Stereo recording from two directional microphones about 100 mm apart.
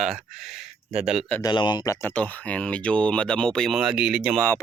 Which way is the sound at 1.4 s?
50° left (ahead or behind).